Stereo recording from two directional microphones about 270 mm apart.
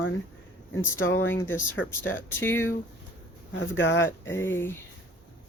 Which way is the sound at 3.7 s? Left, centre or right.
Left.